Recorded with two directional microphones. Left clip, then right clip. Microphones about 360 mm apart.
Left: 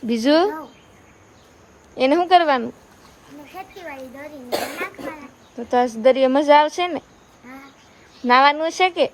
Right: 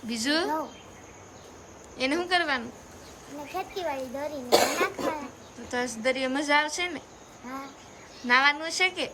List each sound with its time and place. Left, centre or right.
0.1 s speech: centre
2.0 s speech: centre
3.5 s speech: centre
4.4 s speech: right
5.6 s speech: centre
8.3 s speech: centre